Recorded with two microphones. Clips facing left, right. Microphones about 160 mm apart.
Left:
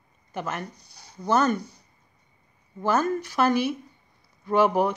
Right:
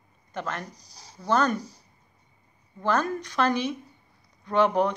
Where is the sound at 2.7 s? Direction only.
5° left (ahead or behind).